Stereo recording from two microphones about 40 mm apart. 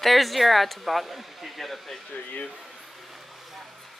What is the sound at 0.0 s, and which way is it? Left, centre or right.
Speech, centre.